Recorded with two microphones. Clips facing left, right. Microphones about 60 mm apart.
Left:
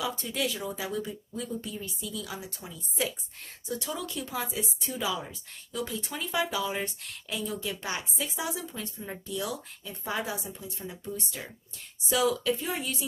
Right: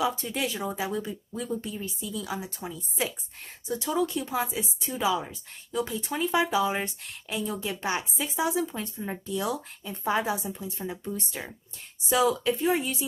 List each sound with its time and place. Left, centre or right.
0.0 s speech: right
3.6 s speech: centre